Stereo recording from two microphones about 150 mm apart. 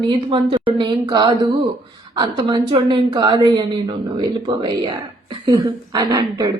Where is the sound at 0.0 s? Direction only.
30° right (ahead or behind).